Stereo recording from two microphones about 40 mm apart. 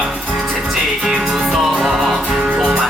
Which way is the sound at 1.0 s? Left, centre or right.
Right.